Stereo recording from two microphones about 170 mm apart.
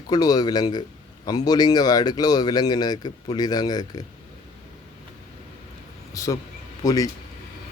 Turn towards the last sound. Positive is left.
turn(degrees=20)  # may be behind; listen again after turning